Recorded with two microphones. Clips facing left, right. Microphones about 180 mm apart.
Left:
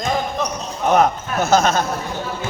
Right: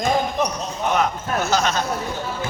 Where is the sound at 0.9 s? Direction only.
45° left (ahead or behind).